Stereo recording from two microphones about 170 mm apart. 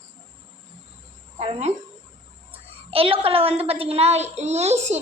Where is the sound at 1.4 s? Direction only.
35° right (ahead or behind).